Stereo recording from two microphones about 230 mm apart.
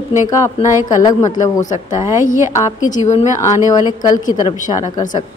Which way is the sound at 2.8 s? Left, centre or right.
Left.